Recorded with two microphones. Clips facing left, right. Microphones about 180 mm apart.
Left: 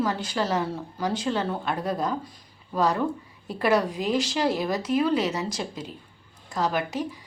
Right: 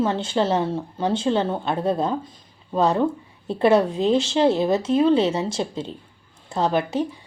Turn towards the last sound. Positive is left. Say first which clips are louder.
# right 5 dB
turn(degrees=-30)  # may be behind; listen again after turning